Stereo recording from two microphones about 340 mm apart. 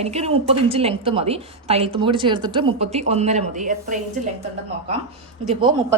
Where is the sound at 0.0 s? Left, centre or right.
Centre.